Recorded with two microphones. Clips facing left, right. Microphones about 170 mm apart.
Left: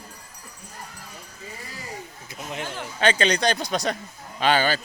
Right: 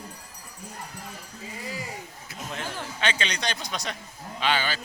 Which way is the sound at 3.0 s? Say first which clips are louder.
Left 9 dB; 40° left (ahead or behind).